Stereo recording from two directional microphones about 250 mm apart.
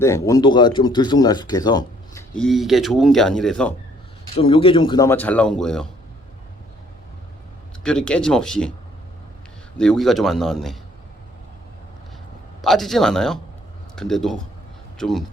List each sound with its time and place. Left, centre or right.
0.0 s speech: centre
2.3 s speech: centre
4.4 s speech: left; by 5.9 s centre
7.9 s speech: centre
9.7 s speech: centre
12.6 s speech: centre